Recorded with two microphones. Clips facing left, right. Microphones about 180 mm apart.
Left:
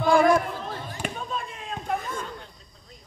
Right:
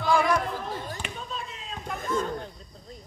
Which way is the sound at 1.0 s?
55° left (ahead or behind).